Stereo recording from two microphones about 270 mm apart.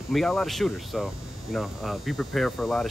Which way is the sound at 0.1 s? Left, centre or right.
Centre.